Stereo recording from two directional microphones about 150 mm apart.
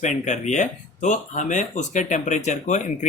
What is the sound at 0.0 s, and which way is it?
Speech, 50° left (ahead or behind).